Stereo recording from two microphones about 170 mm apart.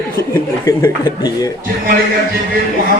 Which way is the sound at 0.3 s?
20° left (ahead or behind).